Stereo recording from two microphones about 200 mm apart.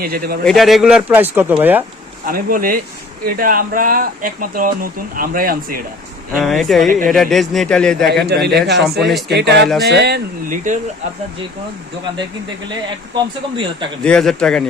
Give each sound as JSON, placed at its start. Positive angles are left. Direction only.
{"t": 0.0, "sound": "speech", "side_deg": -50}
{"t": 0.4, "sound": "speech", "side_deg": 0}
{"t": 2.2, "sound": "speech", "side_deg": -45}
{"t": 6.3, "sound": "a man's voice", "side_deg": 0}
{"t": 8.1, "sound": "speech", "side_deg": -55}
{"t": 13.1, "sound": "speech", "side_deg": -25}
{"t": 14.0, "sound": "a man's voice", "side_deg": 5}